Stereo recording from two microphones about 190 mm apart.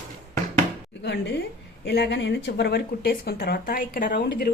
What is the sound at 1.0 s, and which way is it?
Speech, 60° left (ahead or behind).